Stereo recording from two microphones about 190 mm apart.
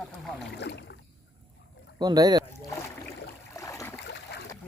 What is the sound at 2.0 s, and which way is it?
Boat, 20° right (ahead or behind).